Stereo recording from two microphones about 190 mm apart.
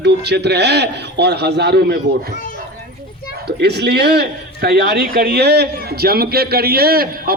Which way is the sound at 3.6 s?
60° right (ahead or behind).